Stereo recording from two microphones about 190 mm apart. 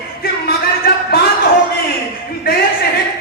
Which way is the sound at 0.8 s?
55° left (ahead or behind).